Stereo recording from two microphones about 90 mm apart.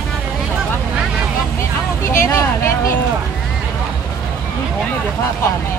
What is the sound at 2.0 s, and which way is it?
Speech, 30° left (ahead or behind).